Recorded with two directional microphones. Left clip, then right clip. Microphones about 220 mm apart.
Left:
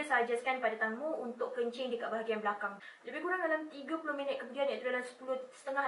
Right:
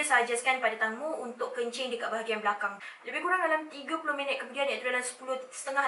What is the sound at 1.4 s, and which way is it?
A woman's voice, 10° left (ahead or behind).